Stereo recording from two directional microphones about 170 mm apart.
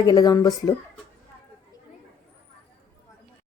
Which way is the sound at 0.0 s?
20° left (ahead or behind).